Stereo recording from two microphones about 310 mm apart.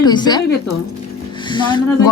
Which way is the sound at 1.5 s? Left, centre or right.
Centre.